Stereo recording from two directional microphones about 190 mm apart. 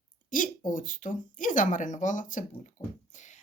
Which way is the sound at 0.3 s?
45° left (ahead or behind).